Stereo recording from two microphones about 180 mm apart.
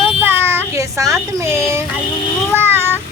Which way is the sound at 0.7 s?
15° right (ahead or behind).